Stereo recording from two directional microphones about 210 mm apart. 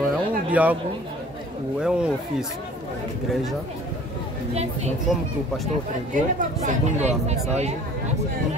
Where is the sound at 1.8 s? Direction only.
5° right (ahead or behind).